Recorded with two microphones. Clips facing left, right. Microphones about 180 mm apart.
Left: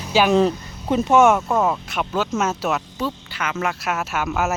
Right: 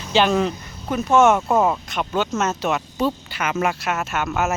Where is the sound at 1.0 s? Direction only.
10° left (ahead or behind).